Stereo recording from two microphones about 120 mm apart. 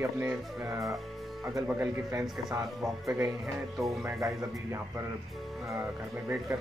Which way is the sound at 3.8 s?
25° right (ahead or behind).